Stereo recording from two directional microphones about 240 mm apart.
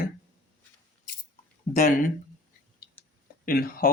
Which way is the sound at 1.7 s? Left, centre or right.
Left.